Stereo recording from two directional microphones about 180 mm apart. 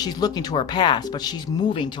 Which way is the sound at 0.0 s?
20° left (ahead or behind).